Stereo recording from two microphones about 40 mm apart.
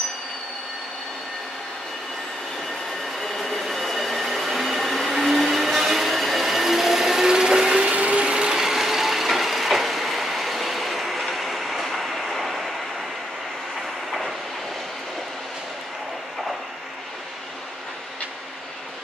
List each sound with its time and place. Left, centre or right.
3.2 s train: centre; by 7.9 s right
7.9 s ratchet: right
8.5 s vehicle: centre